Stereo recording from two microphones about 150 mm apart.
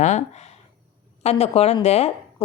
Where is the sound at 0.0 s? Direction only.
50° left (ahead or behind).